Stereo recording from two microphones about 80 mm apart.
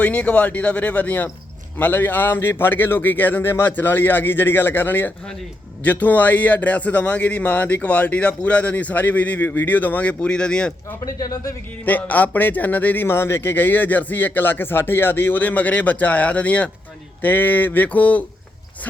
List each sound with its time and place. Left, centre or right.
0.0 s a man's voice: centre
11.0 s speech: left
11.9 s a man's voice: centre